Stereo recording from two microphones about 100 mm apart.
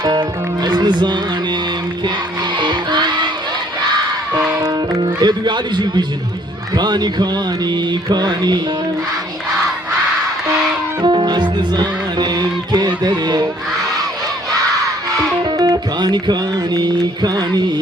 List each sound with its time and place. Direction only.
0.0 s music: 45° right (ahead or behind)
2.6 s music: 50° right (ahead or behind)
4.9 s speech: 50° right (ahead or behind)
6.7 s music: 45° right (ahead or behind)
11.0 s music: 50° right (ahead or behind)
15.4 s music: 45° right (ahead or behind)